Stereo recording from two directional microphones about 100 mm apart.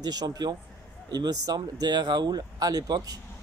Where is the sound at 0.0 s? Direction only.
40° right (ahead or behind).